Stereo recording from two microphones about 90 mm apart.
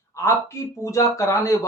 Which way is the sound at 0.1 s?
30° left (ahead or behind).